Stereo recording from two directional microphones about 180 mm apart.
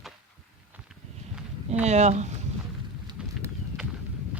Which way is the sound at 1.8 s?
40° right (ahead or behind).